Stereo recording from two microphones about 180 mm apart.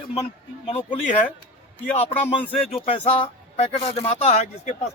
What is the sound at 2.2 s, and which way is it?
Speech, 30° left (ahead or behind).